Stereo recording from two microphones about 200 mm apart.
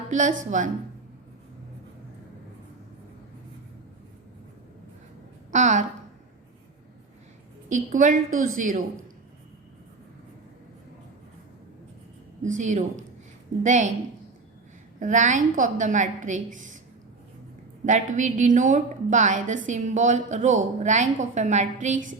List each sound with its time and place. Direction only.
0.1 s a woman's voice: 40° right (ahead or behind)
5.5 s a woman's voice: 35° right (ahead or behind)
7.7 s a woman's voice: 40° right (ahead or behind)
12.5 s a woman's voice: 35° right (ahead or behind)
14.9 s a woman's voice: 40° right (ahead or behind)
17.8 s a woman's voice: 40° right (ahead or behind)